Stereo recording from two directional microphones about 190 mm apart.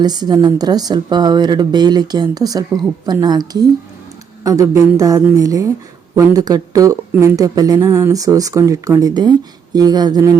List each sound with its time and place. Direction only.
0.0 s a woman's voice: 20° right (ahead or behind)